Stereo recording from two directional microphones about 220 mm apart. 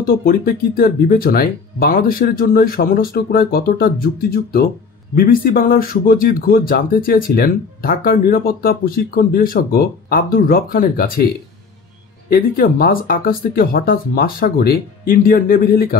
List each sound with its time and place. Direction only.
0.0 s speech: 40° left (ahead or behind)
12.3 s speech: 40° left (ahead or behind)